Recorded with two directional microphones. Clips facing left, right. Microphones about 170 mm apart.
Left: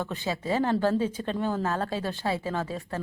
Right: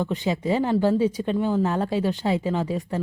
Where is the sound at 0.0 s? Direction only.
15° right (ahead or behind).